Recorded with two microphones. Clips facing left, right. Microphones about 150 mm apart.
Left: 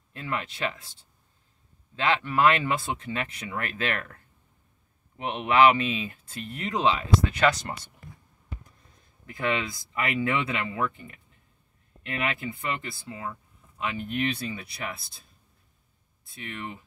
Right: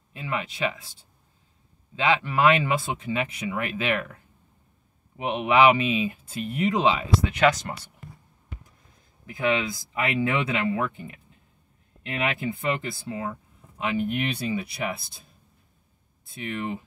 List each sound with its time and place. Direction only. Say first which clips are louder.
0.1 s speech: right 2 dB; 10° right (ahead or behind)
2.0 s speech: right 1 dB; 10° right (ahead or behind)
9.2 s speech: right 4 dB; 20° right (ahead or behind)
13.9 s speech: right 2 dB; 10° right (ahead or behind)
16.3 s speech: right 7 dB; 25° right (ahead or behind)